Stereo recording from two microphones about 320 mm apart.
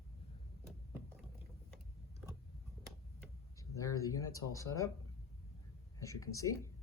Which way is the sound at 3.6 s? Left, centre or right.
Centre.